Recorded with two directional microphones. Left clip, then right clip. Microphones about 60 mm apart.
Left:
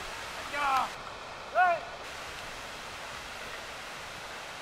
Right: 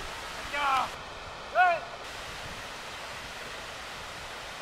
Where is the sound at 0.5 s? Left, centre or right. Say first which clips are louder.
Right 1 dB; right.